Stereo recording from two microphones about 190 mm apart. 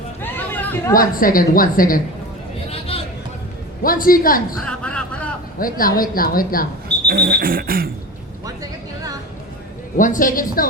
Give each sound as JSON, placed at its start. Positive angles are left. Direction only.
{"t": 0.2, "sound": "chatter", "side_deg": 10}
{"t": 0.9, "sound": "a woman's voice", "side_deg": 50}
{"t": 2.9, "sound": "chatter", "side_deg": 30}
{"t": 3.8, "sound": "a woman's voice", "side_deg": 50}
{"t": 4.6, "sound": "a sound", "side_deg": 5}
{"t": 5.5, "sound": "speech", "side_deg": 50}
{"t": 7.1, "sound": "a sound", "side_deg": -55}
{"t": 10.0, "sound": "a woman's voice", "side_deg": 45}